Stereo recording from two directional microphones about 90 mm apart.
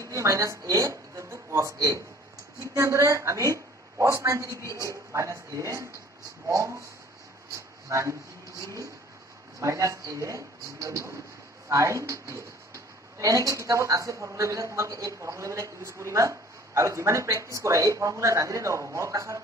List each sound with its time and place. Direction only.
0.1 s a woman's voice: 35° right (ahead or behind)
7.9 s speech: 35° right (ahead or behind)